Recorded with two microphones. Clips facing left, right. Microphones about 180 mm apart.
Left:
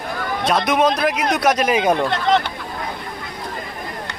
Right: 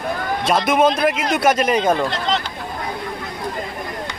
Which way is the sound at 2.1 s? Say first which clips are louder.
Left 4 dB; 55° left (ahead or behind).